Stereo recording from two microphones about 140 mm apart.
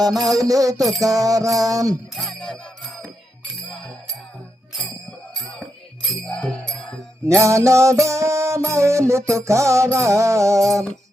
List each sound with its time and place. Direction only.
0.0 s music: 25° right (ahead or behind)
2.1 s music: 5° left (ahead or behind)
6.1 s music: 5° left (ahead or behind)
7.3 s music: 20° right (ahead or behind)